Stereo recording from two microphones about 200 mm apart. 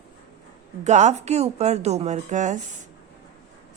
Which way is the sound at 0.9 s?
35° right (ahead or behind).